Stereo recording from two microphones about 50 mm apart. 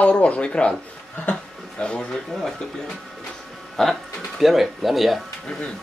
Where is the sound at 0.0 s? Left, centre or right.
Left.